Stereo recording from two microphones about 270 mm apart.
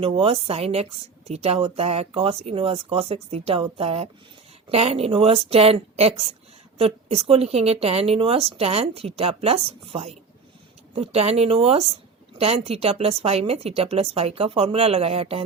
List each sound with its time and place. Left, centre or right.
0.0 s speech: right